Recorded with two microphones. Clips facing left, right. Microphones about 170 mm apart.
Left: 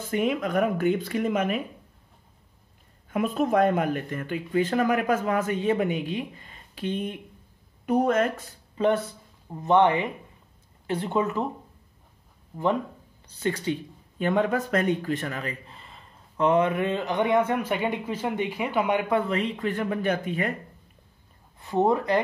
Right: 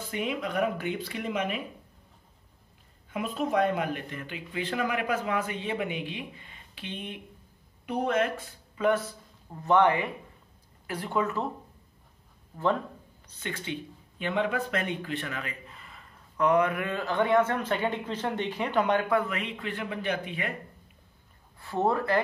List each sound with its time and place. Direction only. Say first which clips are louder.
0.1 s speech: left 6 dB; 50° left (ahead or behind)
3.1 s speech: left 5 dB; 50° left (ahead or behind); by 9.0 s 30° left (ahead or behind)
9.6 s speech: left 3 dB; 20° left (ahead or behind)
12.5 s speech: left 2 dB; 15° left (ahead or behind)
13.3 s speech: left 8 dB; 40° left (ahead or behind); by 19.1 s 10° left (ahead or behind)
19.1 s speech: left 3 dB; 30° left (ahead or behind)
21.5 s speech: left 4 dB; 20° left (ahead or behind)